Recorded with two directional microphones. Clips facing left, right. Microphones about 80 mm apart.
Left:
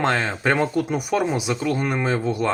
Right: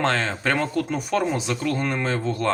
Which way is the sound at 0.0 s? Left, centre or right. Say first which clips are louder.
Left 2 dB; centre.